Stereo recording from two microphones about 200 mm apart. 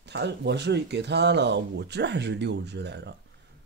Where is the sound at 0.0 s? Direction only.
60° right (ahead or behind).